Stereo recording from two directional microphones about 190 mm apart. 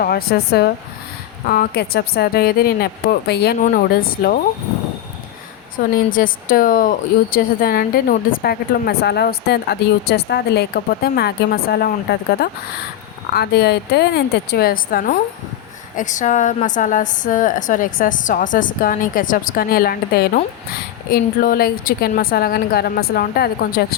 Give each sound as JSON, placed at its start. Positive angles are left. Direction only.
{"t": 0.0, "sound": "speech", "side_deg": 55}
{"t": 5.7, "sound": "speech", "side_deg": 45}